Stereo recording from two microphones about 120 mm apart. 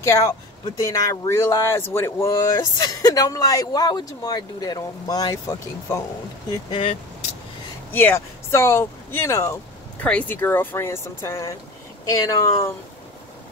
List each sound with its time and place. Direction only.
0.0 s speech: 25° left (ahead or behind)
6.7 s speech: 50° left (ahead or behind)
7.9 s speech: 15° left (ahead or behind)